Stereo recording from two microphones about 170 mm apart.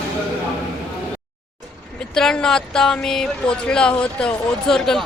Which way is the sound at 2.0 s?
5° left (ahead or behind).